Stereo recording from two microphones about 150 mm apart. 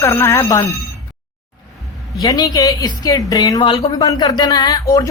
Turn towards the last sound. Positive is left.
turn(degrees=25)  # may be behind; listen again after turning